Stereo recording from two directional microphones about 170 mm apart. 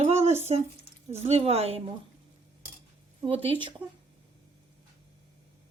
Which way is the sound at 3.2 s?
30° right (ahead or behind).